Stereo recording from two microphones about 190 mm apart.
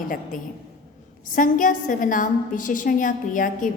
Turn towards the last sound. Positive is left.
turn(degrees=45)  # may be behind; listen again after turning